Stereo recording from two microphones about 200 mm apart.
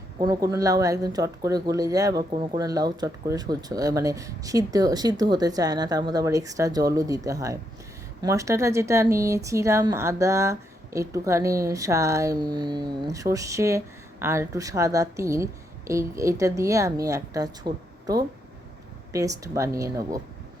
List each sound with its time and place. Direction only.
0.2 s speech: 20° right (ahead or behind)